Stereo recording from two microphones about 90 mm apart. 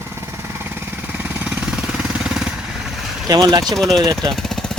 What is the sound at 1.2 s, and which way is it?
Jackhammer, 15° right (ahead or behind).